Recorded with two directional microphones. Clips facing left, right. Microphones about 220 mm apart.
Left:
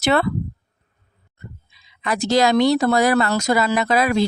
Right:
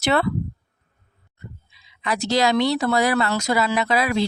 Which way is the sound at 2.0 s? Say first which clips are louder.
Left 3 dB; 50° left (ahead or behind).